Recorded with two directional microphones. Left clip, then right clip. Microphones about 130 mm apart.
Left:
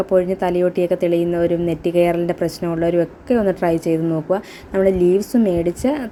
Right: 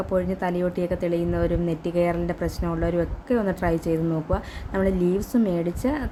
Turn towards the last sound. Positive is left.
turn(degrees=30)  # may be behind; listen again after turning